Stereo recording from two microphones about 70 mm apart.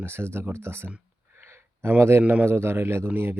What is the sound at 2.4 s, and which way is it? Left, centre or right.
Speech, right.